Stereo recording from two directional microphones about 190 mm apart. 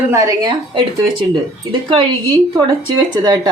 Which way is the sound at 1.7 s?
25° right (ahead or behind).